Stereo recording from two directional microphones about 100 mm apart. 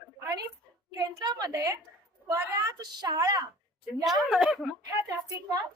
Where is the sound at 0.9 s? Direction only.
45° right (ahead or behind).